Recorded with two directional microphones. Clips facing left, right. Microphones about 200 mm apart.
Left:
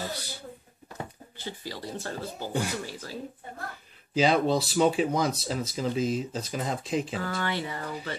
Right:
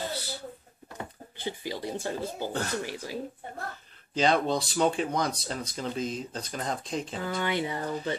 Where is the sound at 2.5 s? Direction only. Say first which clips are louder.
Left 5 dB; 10° left (ahead or behind).